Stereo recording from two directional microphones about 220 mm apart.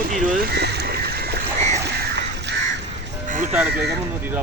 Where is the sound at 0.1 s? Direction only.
35° right (ahead or behind).